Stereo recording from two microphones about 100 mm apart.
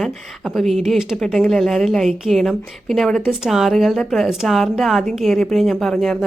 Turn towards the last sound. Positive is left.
turn(degrees=0)  # may be behind; listen again after turning